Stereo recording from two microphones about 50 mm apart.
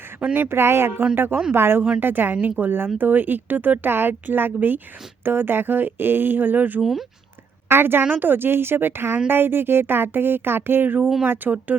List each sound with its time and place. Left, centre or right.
0.3 s speech: right
2.0 s speech: right
7.7 s speech: right